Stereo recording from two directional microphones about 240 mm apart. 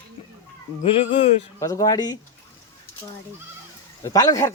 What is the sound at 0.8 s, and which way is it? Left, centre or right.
A man's voice, left.